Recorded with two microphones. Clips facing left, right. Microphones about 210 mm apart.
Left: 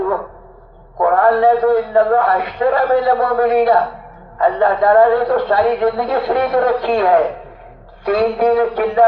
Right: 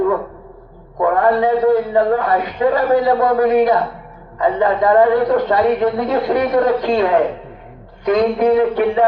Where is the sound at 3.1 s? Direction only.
15° right (ahead or behind).